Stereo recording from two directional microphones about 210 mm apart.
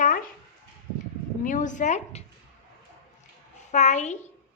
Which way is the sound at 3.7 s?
35° left (ahead or behind).